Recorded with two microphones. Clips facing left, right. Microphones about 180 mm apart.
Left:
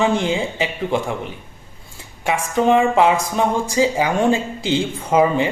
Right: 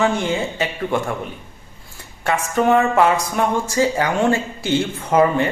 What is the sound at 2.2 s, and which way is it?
Speech, 15° left (ahead or behind).